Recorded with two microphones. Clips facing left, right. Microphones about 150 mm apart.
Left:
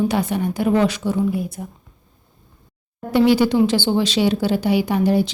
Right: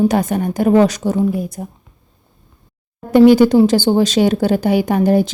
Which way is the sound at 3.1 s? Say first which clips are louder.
Right 7 dB; 45° right (ahead or behind).